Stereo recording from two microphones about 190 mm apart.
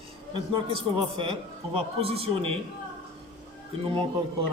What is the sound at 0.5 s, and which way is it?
A man's voice, 30° right (ahead or behind).